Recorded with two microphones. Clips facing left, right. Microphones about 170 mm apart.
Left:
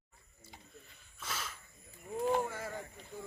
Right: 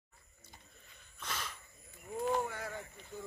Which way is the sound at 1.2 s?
5° left (ahead or behind).